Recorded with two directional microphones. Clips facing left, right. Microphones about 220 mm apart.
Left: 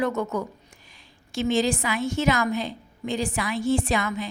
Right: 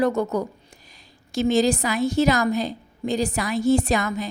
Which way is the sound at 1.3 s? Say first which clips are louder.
Right 4 dB; 40° right (ahead or behind).